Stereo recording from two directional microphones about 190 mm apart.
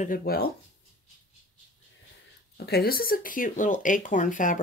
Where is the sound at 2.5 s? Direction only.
55° left (ahead or behind).